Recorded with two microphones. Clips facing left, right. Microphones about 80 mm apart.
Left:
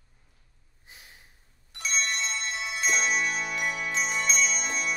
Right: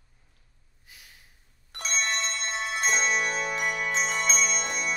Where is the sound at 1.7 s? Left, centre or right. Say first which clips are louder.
Right 1 dB; right.